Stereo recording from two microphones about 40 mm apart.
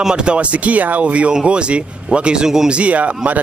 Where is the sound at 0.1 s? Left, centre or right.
Right.